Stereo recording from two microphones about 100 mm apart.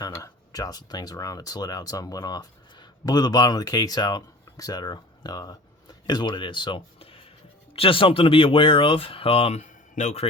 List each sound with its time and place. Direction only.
0.0 s speech: 40° left (ahead or behind); by 9.6 s 75° left (ahead or behind)